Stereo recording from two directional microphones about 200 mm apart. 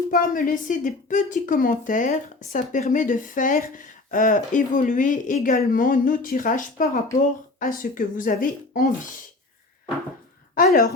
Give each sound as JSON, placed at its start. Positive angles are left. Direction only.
{"t": 0.1, "sound": "a woman's voice", "side_deg": 45}
{"t": 10.5, "sound": "a woman's voice", "side_deg": 45}